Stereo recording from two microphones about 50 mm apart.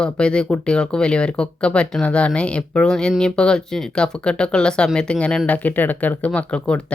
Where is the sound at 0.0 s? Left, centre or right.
Centre.